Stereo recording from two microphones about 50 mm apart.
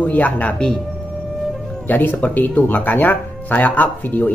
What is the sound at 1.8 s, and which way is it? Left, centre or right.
Speech, left.